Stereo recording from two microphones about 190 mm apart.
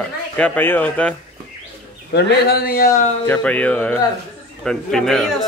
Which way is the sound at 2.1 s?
60° left (ahead or behind).